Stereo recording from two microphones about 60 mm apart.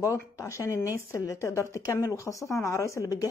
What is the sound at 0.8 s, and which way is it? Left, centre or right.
A woman's voice, left.